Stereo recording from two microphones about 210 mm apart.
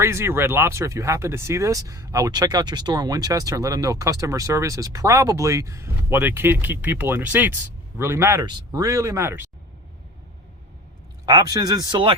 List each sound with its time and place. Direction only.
0.0 s speech: 10° right (ahead or behind)
11.3 s speech: 20° right (ahead or behind)